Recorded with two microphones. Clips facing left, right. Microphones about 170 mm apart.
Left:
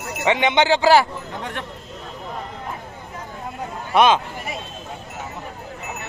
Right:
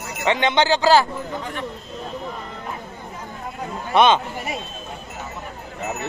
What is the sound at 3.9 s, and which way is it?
Speech, 5° left (ahead or behind).